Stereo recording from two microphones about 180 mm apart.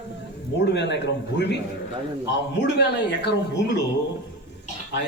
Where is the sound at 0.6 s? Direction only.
75° left (ahead or behind).